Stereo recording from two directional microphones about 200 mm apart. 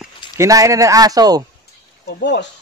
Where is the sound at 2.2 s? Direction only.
60° left (ahead or behind).